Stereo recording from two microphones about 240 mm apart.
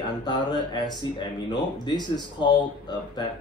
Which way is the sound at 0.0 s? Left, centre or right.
Centre.